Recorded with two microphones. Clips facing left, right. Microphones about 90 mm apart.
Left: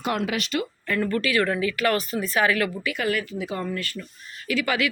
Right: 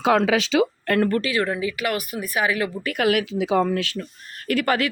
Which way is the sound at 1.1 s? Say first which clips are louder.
Right 2 dB; 35° right (ahead or behind).